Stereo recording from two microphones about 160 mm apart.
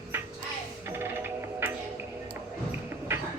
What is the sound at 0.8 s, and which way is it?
Music, 15° right (ahead or behind).